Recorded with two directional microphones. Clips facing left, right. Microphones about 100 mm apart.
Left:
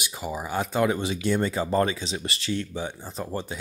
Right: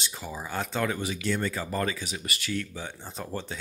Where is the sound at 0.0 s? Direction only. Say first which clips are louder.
Left 5 dB; 15° left (ahead or behind).